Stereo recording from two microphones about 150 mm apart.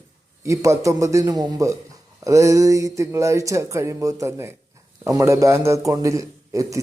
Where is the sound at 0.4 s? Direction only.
20° right (ahead or behind).